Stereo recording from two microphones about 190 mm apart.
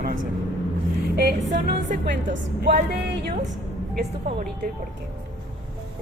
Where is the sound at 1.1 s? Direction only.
55° right (ahead or behind).